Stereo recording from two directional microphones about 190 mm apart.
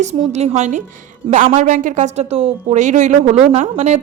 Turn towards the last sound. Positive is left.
turn(degrees=-35)  # may be behind; listen again after turning